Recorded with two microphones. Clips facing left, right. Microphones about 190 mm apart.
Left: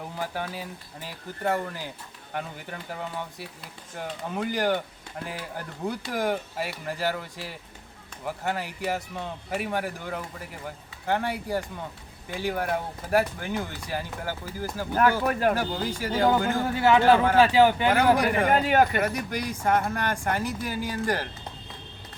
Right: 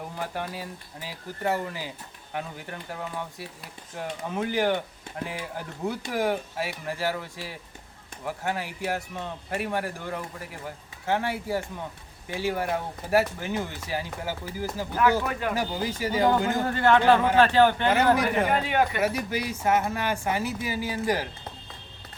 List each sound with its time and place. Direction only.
0.2 s speech: centre (ahead or behind)
15.3 s speech: 45° left (ahead or behind)
15.5 s speech: 10° right (ahead or behind)
16.5 s speech: 5° left (ahead or behind)
19.0 s speech: 5° right (ahead or behind)